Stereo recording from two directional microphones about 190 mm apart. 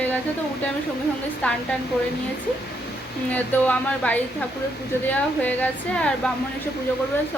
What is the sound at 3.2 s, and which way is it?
A woman's voice, 10° left (ahead or behind).